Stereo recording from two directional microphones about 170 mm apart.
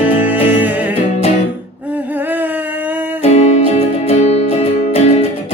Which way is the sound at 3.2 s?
40° left (ahead or behind).